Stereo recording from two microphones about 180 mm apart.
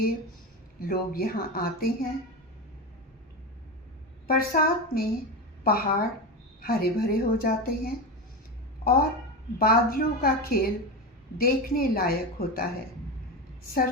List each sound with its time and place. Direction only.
0.8 s a woman's voice: 55° left (ahead or behind)
4.3 s a woman's voice: 55° left (ahead or behind)